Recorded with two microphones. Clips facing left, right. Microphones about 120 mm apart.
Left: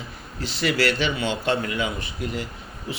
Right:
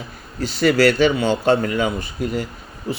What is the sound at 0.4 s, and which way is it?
Speech, 45° right (ahead or behind).